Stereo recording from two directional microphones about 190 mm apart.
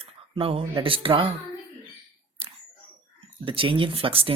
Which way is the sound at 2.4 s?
30° right (ahead or behind).